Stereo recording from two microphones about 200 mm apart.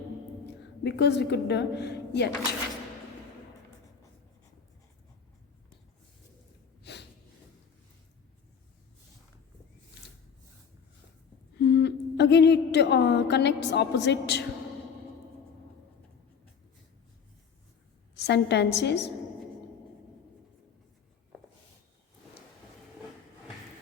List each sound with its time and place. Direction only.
0.9 s a woman's voice: 60° left (ahead or behind)
6.9 s snort: 55° left (ahead or behind)
11.5 s a sound: 55° left (ahead or behind)
18.2 s a woman's voice: 55° left (ahead or behind)